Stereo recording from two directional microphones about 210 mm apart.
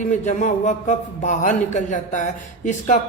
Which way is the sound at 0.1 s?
35° left (ahead or behind).